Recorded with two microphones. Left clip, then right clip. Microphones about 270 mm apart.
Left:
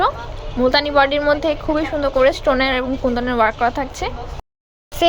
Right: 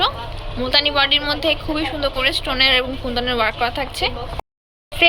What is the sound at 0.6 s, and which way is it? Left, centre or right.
A woman's voice, centre.